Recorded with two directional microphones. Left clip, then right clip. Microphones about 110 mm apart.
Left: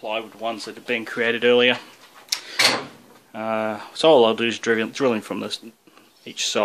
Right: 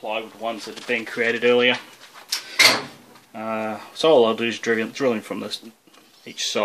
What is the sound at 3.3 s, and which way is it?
Speech, 30° left (ahead or behind).